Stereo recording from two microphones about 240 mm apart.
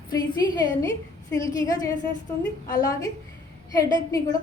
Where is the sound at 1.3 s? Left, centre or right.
Centre.